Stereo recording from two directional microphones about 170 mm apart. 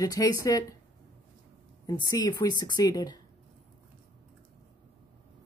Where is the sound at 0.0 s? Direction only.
20° left (ahead or behind).